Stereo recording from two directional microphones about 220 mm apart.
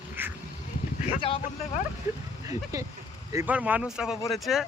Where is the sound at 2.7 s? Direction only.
15° right (ahead or behind).